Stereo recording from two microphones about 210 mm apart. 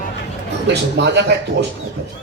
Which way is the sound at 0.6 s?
55° right (ahead or behind).